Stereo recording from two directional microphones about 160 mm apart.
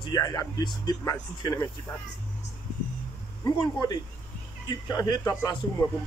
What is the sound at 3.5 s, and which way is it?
Speech, 25° left (ahead or behind).